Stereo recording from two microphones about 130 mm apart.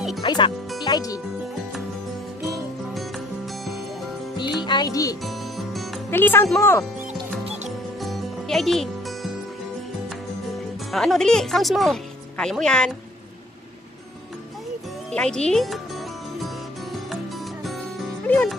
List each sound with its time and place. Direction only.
0.2 s speech: 35° left (ahead or behind)
4.4 s music: 35° left (ahead or behind)
5.2 s music: centre (ahead or behind)
6.0 s speech: 15° left (ahead or behind)
7.4 s music: 60° right (ahead or behind)
8.0 s music: centre (ahead or behind)
10.5 s speech: centre (ahead or behind)
15.0 s speech: 5° left (ahead or behind)
16.3 s music: centre (ahead or behind)
18.2 s music: 10° left (ahead or behind)